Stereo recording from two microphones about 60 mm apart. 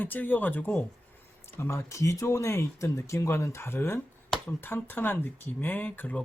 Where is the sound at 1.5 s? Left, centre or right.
Left.